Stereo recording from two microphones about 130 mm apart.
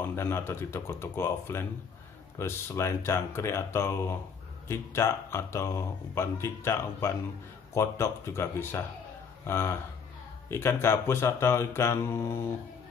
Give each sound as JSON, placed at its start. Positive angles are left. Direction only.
{"t": 0.0, "sound": "speech", "side_deg": 20}